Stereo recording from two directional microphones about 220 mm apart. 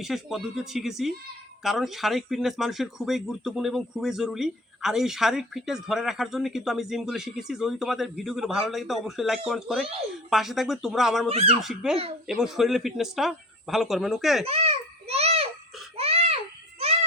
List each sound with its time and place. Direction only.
0.0 s speech: centre (ahead or behind)
11.3 s speech: 25° right (ahead or behind)
11.6 s speech: centre (ahead or behind)
14.4 s a sound: 25° right (ahead or behind)